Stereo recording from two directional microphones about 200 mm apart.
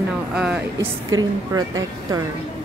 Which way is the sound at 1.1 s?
20° right (ahead or behind).